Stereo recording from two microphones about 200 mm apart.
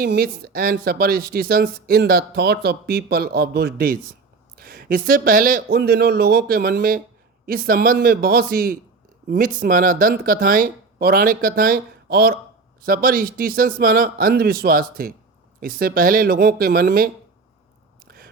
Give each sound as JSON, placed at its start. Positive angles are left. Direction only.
{"t": 0.0, "sound": "a woman's voice", "side_deg": -50}
{"t": 18.1, "sound": "biting", "side_deg": -50}